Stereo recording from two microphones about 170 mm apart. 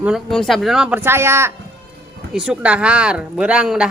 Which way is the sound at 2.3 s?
5° right (ahead or behind).